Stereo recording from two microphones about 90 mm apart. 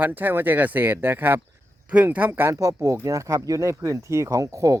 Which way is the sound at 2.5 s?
35° right (ahead or behind).